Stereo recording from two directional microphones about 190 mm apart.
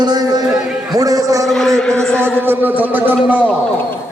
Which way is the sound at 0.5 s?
Centre (ahead or behind).